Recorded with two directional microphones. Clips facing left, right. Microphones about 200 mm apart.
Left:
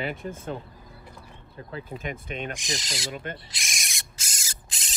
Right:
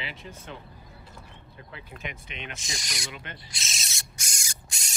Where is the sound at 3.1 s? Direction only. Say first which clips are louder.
Left 7 dB; 50° left (ahead or behind).